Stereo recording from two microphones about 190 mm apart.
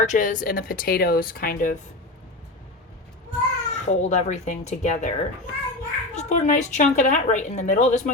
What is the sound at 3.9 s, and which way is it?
A woman's voice, 40° left (ahead or behind).